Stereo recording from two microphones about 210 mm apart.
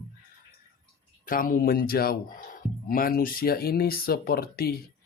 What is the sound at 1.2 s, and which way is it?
Speech, 40° left (ahead or behind).